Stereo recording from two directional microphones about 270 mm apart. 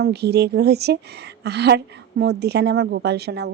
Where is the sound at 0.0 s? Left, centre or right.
Right.